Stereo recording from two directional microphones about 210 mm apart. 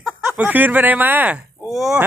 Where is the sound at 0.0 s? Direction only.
5° right (ahead or behind).